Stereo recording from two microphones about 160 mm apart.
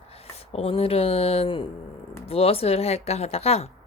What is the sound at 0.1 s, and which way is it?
Speech, 40° left (ahead or behind).